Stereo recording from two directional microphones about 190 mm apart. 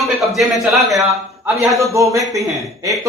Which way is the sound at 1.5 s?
15° right (ahead or behind).